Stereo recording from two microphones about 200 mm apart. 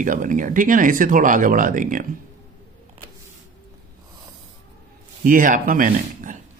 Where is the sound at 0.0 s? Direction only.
40° right (ahead or behind).